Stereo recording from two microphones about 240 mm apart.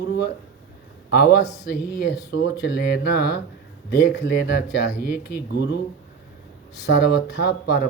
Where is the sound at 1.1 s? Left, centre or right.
Left.